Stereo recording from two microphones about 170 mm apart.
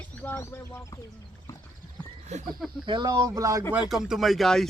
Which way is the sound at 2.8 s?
25° right (ahead or behind).